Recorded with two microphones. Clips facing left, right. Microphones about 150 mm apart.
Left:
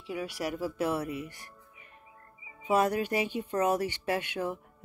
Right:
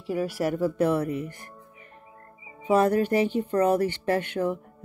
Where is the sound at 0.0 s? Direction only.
45° right (ahead or behind).